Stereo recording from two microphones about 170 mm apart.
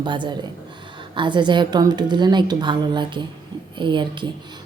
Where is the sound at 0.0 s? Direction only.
25° right (ahead or behind).